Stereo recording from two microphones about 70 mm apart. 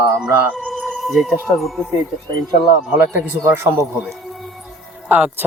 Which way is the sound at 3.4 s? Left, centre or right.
Right.